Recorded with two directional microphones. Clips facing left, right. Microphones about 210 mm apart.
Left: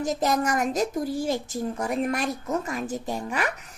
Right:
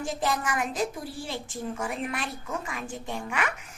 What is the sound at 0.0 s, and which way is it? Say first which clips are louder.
A woman's voice: left 5 dB; 40° left (ahead or behind).